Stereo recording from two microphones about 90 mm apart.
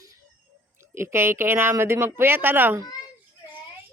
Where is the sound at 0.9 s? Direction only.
30° right (ahead or behind).